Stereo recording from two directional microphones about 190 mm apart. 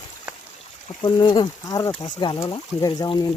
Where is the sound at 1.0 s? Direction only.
25° left (ahead or behind).